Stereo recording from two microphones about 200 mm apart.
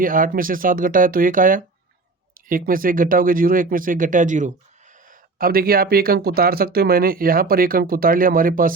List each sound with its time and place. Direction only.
0.0 s speech: 45° right (ahead or behind)